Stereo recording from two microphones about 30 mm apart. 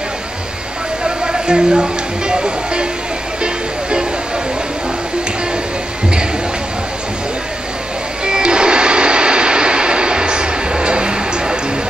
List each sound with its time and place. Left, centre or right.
1.0 s speech: right
8.3 s vehicle: right